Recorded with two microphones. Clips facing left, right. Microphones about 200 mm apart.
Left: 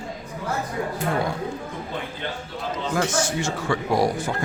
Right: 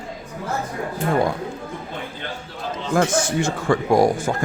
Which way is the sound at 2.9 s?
55° right (ahead or behind).